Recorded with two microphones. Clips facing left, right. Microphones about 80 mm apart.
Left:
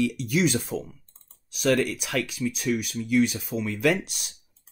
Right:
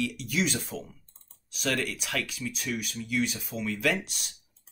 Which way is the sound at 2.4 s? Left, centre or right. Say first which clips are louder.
Left 8 dB; left.